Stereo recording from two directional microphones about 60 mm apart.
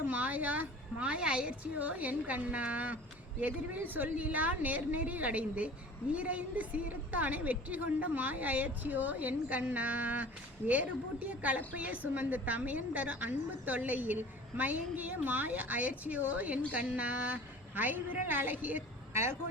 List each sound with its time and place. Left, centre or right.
0.1 s a woman's voice: right
19.1 s speech: right